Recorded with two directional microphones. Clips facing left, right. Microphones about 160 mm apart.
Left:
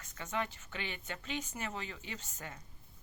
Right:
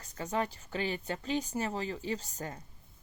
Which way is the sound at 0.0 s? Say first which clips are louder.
Right 5 dB; 35° right (ahead or behind).